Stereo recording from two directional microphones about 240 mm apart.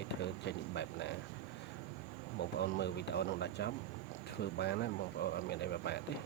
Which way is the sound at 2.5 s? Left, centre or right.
Left.